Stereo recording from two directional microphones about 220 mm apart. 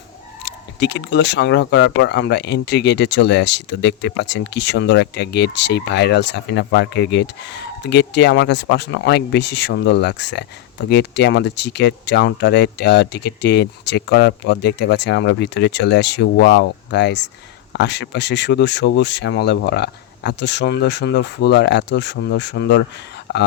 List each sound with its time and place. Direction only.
0.4 s speech: 50° left (ahead or behind)